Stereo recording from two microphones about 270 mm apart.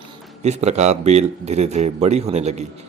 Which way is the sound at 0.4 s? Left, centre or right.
Right.